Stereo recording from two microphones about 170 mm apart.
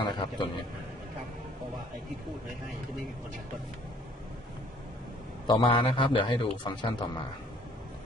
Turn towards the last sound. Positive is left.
turn(degrees=25)  # may be behind; listen again after turning